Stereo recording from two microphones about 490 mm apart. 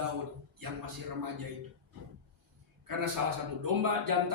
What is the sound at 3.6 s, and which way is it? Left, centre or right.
Speech, right.